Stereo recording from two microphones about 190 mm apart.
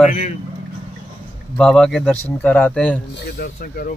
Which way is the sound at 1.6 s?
5° left (ahead or behind).